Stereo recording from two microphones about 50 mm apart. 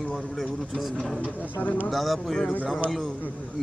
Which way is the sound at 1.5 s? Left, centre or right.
Left.